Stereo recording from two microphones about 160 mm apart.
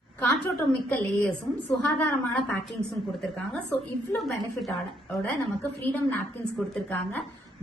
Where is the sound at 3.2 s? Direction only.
5° left (ahead or behind).